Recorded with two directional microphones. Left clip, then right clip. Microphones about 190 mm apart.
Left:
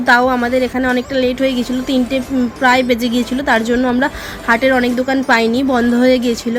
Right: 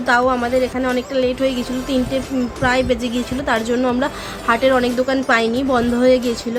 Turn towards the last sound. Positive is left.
turn(degrees=15)  # may be behind; listen again after turning